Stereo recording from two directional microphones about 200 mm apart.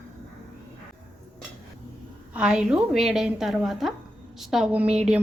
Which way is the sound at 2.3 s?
5° right (ahead or behind).